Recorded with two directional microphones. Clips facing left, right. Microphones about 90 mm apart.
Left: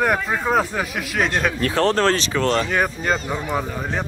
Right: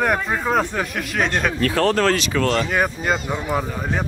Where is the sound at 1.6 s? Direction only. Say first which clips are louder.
Right 1 dB; 30° left (ahead or behind).